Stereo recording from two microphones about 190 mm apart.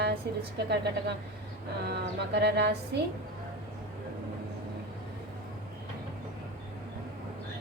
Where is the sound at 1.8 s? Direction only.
60° right (ahead or behind).